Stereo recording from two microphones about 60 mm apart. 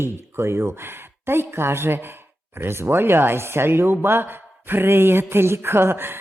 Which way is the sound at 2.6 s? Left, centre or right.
Right.